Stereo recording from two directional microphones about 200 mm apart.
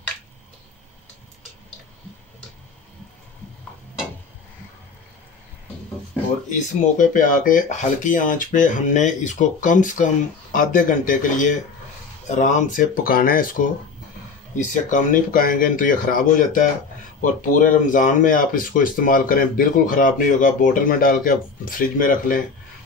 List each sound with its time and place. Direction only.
6.5 s speech: 40° left (ahead or behind)
14.7 s speech: 40° left (ahead or behind)